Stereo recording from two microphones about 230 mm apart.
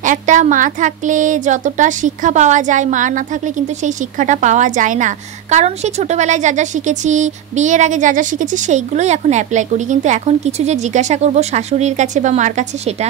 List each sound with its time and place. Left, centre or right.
0.0 s a woman's voice: right